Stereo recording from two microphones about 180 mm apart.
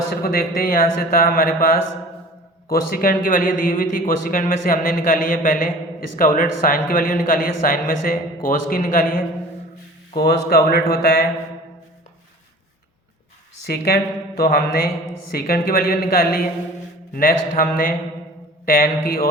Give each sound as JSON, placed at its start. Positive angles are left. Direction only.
{"t": 0.2, "sound": "a man's voice", "side_deg": 55}
{"t": 2.6, "sound": "a man's voice", "side_deg": 50}
{"t": 10.2, "sound": "speech", "side_deg": 60}
{"t": 13.7, "sound": "a man's voice", "side_deg": 60}